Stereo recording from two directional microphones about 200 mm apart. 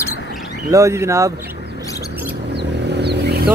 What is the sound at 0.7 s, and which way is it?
Speech, 15° right (ahead or behind).